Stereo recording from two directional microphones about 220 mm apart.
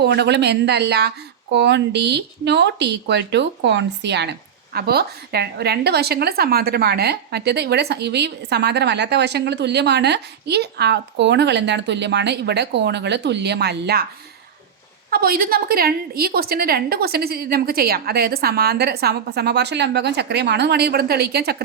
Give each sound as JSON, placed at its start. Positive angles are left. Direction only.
{"t": 0.0, "sound": "speech", "side_deg": -50}
{"t": 15.1, "sound": "speech", "side_deg": -45}